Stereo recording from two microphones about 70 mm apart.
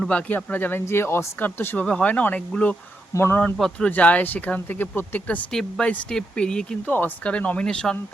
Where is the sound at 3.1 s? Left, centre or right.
Left.